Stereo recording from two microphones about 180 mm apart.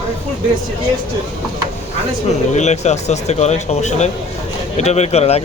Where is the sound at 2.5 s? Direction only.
40° left (ahead or behind).